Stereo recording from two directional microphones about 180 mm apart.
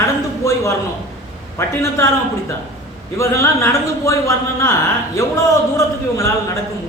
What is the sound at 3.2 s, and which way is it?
A man's voice, 15° left (ahead or behind).